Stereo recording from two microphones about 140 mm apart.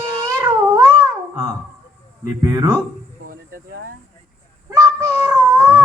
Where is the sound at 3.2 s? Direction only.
90° right.